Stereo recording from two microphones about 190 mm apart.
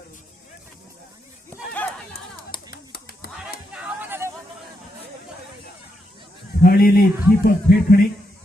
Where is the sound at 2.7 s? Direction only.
50° left (ahead or behind).